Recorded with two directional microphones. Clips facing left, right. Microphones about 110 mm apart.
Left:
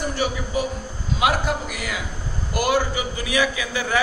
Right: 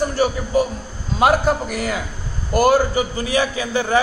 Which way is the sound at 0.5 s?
40° right (ahead or behind).